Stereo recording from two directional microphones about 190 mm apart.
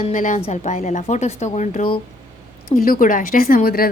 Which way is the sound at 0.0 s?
40° left (ahead or behind).